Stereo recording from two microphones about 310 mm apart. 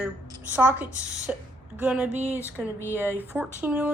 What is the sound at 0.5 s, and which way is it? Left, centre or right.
Speech, centre.